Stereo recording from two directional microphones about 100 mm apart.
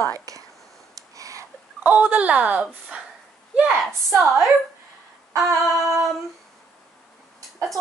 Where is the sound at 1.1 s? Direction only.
35° right (ahead or behind).